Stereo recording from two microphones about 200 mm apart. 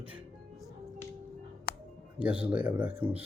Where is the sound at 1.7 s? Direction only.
55° left (ahead or behind).